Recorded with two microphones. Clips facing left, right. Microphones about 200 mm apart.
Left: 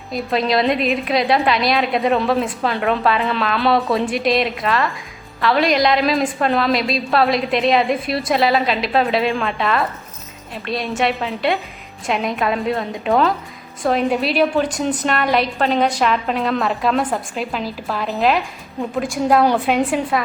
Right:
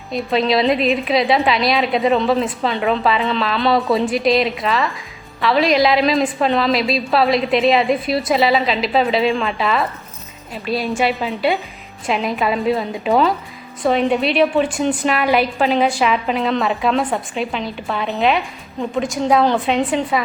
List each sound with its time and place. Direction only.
0.1 s a woman's voice: centre (ahead or behind)